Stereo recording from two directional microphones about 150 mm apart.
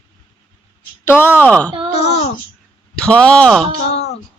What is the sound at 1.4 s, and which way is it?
Speech, 10° left (ahead or behind).